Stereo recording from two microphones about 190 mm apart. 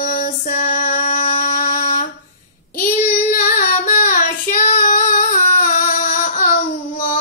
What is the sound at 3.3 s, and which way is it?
Singing, 50° left (ahead or behind).